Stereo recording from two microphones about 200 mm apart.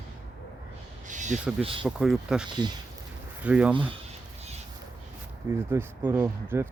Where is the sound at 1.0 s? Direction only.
40° right (ahead or behind).